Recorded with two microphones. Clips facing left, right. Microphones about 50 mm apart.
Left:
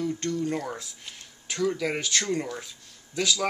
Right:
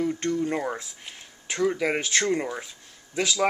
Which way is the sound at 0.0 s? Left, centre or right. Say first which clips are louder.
Right 3 dB; right.